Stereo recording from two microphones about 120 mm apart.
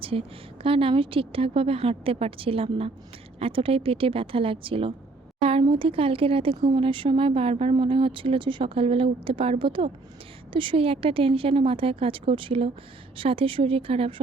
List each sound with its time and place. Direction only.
0.0 s speech: 50° right (ahead or behind)